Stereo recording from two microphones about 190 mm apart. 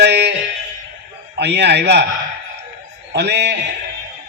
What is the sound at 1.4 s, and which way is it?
Speech, 65° right (ahead or behind).